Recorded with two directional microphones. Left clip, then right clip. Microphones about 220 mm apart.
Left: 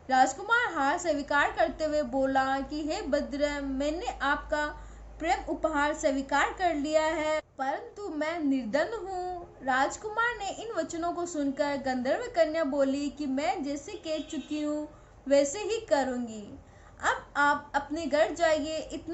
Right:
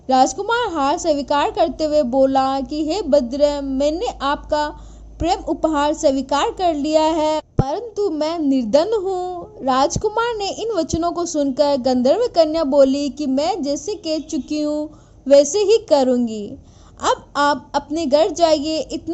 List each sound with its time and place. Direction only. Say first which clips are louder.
0.1 s a woman's voice: right 8 dB; 40° right (ahead or behind)
15.3 s a woman's voice: right 14 dB; 40° right (ahead or behind)